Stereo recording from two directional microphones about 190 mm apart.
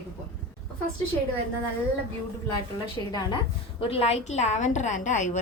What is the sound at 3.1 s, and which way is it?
A woman's voice, 20° left (ahead or behind).